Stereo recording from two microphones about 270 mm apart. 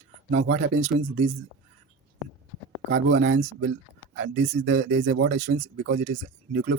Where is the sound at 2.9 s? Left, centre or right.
Right.